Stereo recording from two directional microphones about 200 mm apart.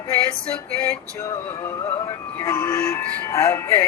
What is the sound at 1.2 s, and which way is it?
Music, 15° left (ahead or behind).